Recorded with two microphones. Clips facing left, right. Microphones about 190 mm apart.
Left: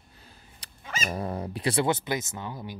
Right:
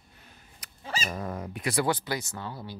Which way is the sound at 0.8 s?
30° right (ahead or behind).